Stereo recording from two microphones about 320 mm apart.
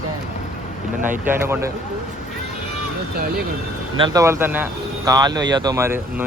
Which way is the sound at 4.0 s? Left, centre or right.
Centre.